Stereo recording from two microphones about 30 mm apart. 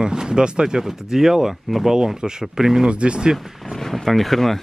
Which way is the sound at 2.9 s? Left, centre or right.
Right.